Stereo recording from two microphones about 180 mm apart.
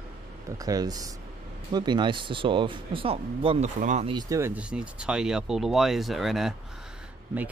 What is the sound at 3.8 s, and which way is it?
Speech, 40° right (ahead or behind).